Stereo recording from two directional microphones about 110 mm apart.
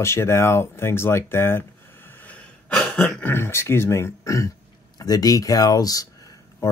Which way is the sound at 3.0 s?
15° left (ahead or behind).